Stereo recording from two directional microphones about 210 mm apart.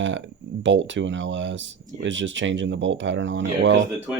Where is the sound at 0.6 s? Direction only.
60° right (ahead or behind).